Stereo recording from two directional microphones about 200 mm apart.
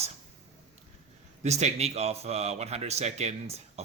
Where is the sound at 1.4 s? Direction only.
35° right (ahead or behind).